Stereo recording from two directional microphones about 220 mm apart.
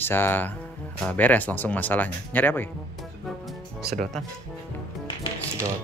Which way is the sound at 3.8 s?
40° right (ahead or behind).